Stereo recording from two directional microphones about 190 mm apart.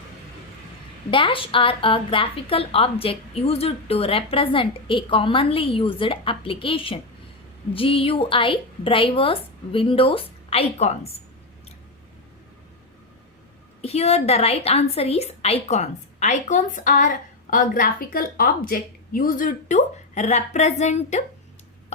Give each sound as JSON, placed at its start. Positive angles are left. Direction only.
{"t": 1.1, "sound": "a woman's voice", "side_deg": 25}
{"t": 13.8, "sound": "a woman's voice", "side_deg": 35}